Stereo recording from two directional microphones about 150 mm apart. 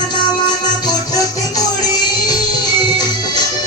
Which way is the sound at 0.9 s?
25° left (ahead or behind).